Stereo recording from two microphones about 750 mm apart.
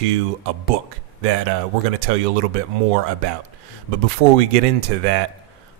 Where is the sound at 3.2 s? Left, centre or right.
Right.